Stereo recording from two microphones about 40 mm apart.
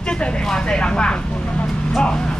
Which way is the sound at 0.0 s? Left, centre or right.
Left.